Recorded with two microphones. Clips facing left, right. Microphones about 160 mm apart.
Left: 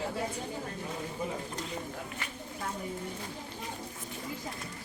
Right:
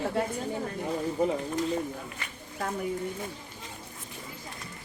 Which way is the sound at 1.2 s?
65° right (ahead or behind).